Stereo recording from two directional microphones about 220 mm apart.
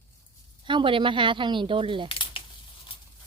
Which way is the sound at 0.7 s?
20° right (ahead or behind).